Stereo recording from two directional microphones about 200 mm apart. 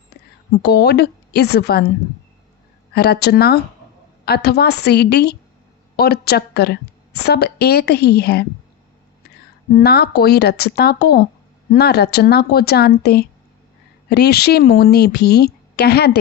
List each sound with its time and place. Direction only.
0.6 s a woman's voice: 55° left (ahead or behind)
2.9 s a woman's voice: 50° left (ahead or behind)
9.7 s a woman's voice: 55° left (ahead or behind)